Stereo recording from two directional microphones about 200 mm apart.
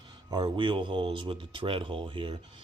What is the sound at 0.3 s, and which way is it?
Speech, 20° right (ahead or behind).